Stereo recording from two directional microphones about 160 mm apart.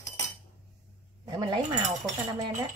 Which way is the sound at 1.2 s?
30° right (ahead or behind).